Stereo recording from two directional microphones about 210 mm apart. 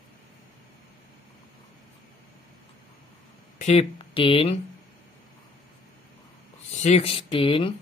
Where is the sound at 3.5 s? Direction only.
30° left (ahead or behind).